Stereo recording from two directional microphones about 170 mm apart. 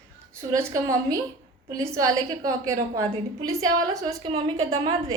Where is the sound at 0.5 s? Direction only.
20° right (ahead or behind).